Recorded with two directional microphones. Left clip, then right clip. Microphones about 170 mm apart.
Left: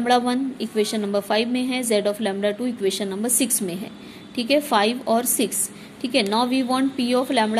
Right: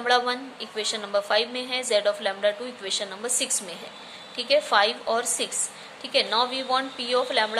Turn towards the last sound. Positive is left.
turn(degrees=35)  # may be behind; listen again after turning